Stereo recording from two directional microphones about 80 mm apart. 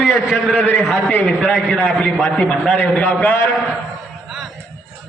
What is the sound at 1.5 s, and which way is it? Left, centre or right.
A man's voice, centre.